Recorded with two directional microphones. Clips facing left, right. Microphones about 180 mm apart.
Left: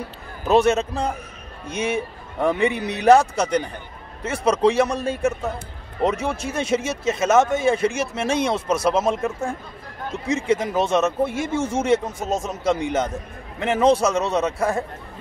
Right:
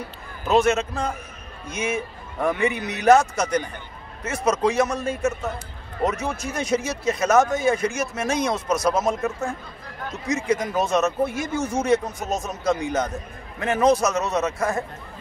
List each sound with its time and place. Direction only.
0.5 s a man's voice: 35° left (ahead or behind)